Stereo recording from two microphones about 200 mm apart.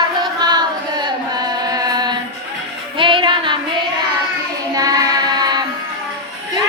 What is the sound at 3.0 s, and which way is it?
Child singing, 25° right (ahead or behind).